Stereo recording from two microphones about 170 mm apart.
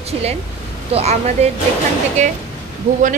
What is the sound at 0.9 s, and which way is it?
Speech, 40° right (ahead or behind).